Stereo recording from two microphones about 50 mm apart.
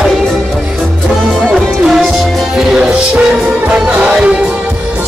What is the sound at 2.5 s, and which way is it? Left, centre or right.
Music, centre.